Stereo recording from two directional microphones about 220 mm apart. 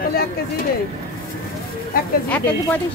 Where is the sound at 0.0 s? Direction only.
45° left (ahead or behind).